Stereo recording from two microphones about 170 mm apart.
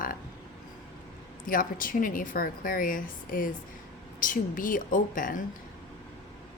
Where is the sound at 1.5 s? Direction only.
55° left (ahead or behind).